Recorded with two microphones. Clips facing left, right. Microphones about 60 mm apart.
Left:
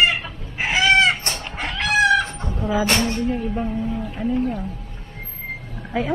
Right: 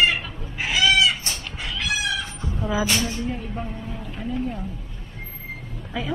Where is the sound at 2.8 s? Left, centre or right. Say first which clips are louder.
Left 5 dB; left.